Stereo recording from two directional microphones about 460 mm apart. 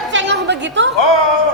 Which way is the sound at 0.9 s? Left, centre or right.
Left.